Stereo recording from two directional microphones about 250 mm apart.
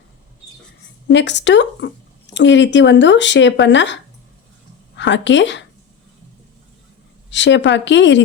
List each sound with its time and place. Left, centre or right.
1.0 s speech: left
4.9 s a woman's voice: left
7.3 s speech: left